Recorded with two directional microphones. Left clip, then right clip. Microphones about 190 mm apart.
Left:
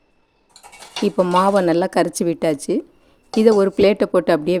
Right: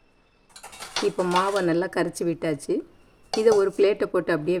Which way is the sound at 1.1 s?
50° left (ahead or behind).